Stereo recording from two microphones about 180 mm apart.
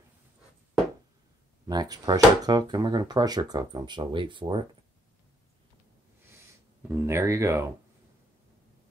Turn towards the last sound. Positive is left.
turn(degrees=-15)  # may be behind; listen again after turning